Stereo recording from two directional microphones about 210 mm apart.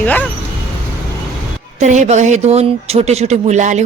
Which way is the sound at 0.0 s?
5° left (ahead or behind).